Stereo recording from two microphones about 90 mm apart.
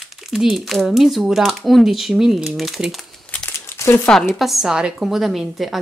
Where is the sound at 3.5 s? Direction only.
30° left (ahead or behind).